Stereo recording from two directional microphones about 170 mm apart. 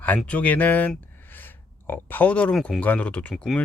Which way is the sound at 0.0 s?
10° left (ahead or behind).